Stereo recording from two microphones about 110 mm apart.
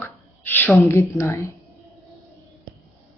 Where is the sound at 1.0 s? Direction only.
25° left (ahead or behind).